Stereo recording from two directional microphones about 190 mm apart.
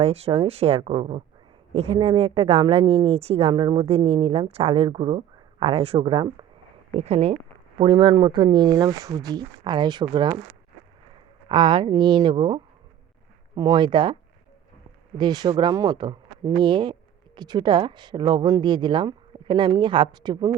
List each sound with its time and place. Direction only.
0.0 s a woman's voice: 30° right (ahead or behind)
11.4 s speech: 25° right (ahead or behind)
13.6 s speech: 20° right (ahead or behind)
15.2 s speech: 20° right (ahead or behind)